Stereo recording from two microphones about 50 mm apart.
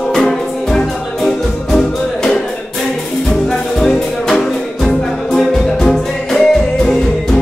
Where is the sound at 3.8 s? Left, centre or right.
Centre.